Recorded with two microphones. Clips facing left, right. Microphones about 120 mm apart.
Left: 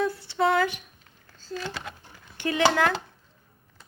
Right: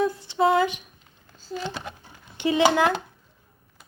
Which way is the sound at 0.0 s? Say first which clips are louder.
Right 3 dB; 15° right (ahead or behind).